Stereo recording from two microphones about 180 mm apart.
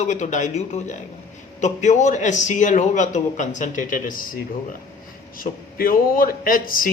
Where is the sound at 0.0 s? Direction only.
40° left (ahead or behind).